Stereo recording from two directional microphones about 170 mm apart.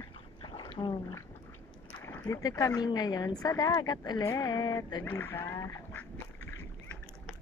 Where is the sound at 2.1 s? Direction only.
15° left (ahead or behind).